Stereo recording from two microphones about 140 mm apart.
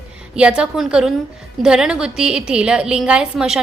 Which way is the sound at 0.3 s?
10° right (ahead or behind).